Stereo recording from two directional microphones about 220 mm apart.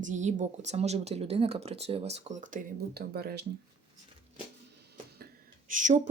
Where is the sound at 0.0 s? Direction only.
35° right (ahead or behind).